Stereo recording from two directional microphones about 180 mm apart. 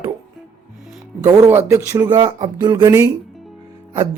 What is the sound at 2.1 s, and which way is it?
Speech, 25° right (ahead or behind).